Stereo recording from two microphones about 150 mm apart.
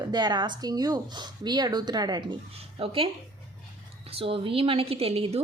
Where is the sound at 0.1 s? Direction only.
30° right (ahead or behind).